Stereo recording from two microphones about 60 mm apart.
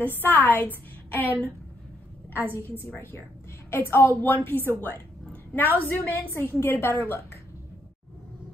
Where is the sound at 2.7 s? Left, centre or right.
Left.